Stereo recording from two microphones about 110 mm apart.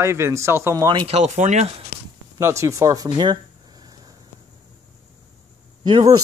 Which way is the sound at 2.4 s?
25° right (ahead or behind).